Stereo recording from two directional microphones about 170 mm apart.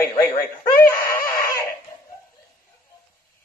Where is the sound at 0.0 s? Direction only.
20° left (ahead or behind).